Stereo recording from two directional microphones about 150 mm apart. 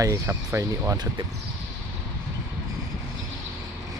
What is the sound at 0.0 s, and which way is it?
Speech, 20° right (ahead or behind).